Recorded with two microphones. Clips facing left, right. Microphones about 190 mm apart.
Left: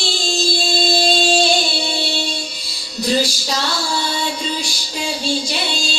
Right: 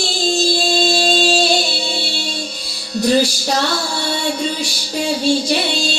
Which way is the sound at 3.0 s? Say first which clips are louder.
Right 4 dB; 55° right (ahead or behind).